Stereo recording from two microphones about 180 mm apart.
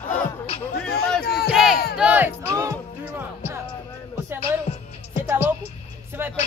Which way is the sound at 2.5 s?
20° right (ahead or behind).